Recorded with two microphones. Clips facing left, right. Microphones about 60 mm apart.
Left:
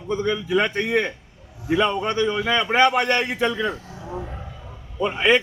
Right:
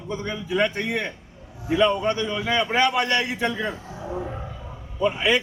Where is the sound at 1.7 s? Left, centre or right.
Left.